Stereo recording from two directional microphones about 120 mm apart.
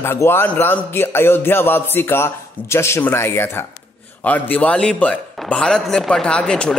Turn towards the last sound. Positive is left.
turn(degrees=10)  # may be behind; listen again after turning